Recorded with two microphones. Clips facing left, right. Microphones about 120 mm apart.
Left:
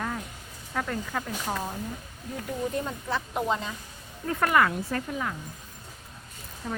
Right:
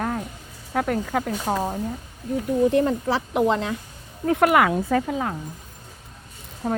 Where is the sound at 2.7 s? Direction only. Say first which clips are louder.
Right 10 dB; 80° right.